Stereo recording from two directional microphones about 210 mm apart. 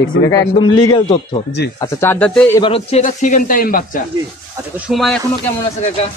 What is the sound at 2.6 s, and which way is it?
Speech, 25° left (ahead or behind).